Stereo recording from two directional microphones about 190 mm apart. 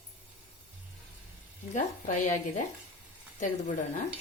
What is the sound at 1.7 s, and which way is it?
Speech, 40° left (ahead or behind).